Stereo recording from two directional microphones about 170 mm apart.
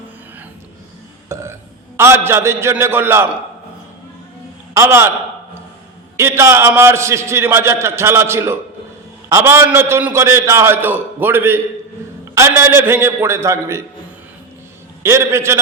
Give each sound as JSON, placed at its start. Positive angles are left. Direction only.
{"t": 1.3, "sound": "burping", "side_deg": -15}
{"t": 2.0, "sound": "a man's voice", "side_deg": -15}
{"t": 4.7, "sound": "a man's voice", "side_deg": -15}
{"t": 6.1, "sound": "a man's voice", "side_deg": -15}
{"t": 15.0, "sound": "a man's voice", "side_deg": -15}